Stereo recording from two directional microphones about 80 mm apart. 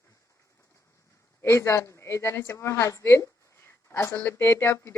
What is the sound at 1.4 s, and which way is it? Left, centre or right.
Speech, left.